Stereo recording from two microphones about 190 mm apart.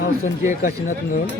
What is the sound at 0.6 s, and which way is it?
Speech, 45° left (ahead or behind).